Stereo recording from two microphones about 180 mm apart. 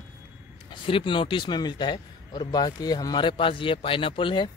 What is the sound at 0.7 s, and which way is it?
Speech, 30° left (ahead or behind).